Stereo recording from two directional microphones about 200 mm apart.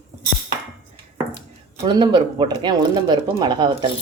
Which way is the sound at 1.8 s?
25° right (ahead or behind).